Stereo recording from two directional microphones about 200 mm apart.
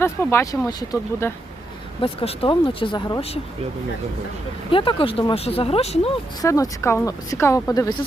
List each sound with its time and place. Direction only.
0.0 s speech: 15° left (ahead or behind); by 3.4 s 30° left (ahead or behind)
4.7 s speech: 25° left (ahead or behind)
6.4 s speech: 15° left (ahead or behind)